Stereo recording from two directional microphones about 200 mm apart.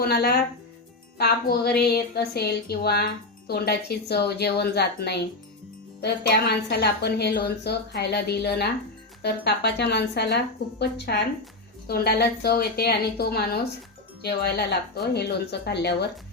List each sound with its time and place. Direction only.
0.0 s a woman's voice: 50° left (ahead or behind)